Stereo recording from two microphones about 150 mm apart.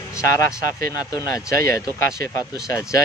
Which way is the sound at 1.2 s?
20° left (ahead or behind).